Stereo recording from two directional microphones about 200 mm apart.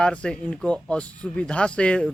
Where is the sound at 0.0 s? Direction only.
5° left (ahead or behind).